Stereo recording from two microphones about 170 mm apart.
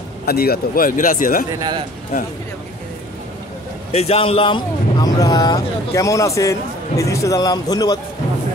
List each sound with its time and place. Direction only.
0.2 s speech: 65° left (ahead or behind)
1.6 s a man's voice: 25° right (ahead or behind)
3.9 s a man's voice: 35° left (ahead or behind)